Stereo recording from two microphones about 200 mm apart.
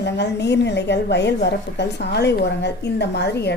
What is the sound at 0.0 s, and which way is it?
A woman's voice, 60° left (ahead or behind).